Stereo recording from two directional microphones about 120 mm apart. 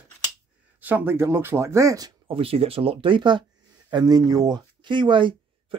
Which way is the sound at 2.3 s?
55° right (ahead or behind).